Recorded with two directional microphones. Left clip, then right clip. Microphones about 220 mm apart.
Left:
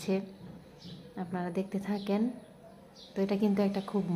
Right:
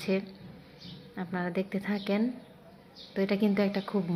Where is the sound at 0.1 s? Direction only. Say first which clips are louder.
Right 2 dB; centre (ahead or behind).